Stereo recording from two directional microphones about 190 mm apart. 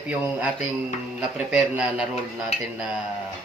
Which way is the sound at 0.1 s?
5° right (ahead or behind).